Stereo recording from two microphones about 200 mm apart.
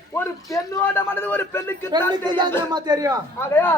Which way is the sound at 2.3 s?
20° right (ahead or behind).